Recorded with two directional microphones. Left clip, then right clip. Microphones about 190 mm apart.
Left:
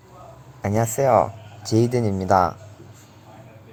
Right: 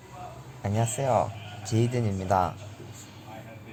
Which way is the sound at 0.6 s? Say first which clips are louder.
Left 9 dB; 30° left (ahead or behind).